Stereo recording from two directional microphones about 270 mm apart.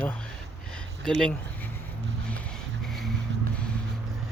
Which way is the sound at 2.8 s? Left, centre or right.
Centre.